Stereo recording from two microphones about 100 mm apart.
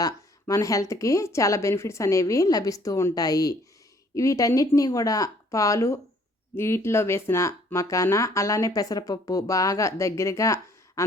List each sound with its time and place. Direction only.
0.0 s speech: 35° left (ahead or behind)